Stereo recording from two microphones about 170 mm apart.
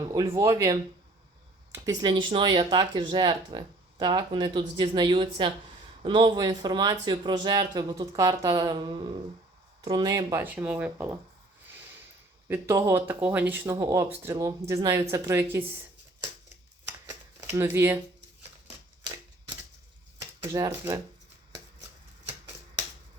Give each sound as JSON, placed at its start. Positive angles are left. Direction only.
{"t": 0.1, "sound": "speech", "side_deg": -20}
{"t": 10.4, "sound": "speech", "side_deg": -10}
{"t": 12.5, "sound": "speech", "side_deg": -15}
{"t": 17.1, "sound": "shuffling cards", "side_deg": -15}
{"t": 20.5, "sound": "speech", "side_deg": -20}